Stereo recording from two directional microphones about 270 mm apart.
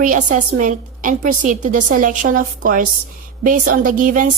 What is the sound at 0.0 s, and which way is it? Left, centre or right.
A woman's voice, right.